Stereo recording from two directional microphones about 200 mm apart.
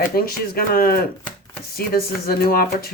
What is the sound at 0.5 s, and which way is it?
Speech, 50° left (ahead or behind).